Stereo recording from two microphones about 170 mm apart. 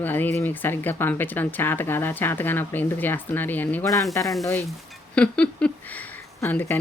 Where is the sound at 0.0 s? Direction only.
10° left (ahead or behind).